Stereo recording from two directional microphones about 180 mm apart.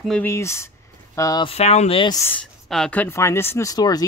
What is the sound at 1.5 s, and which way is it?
Speech, 35° left (ahead or behind).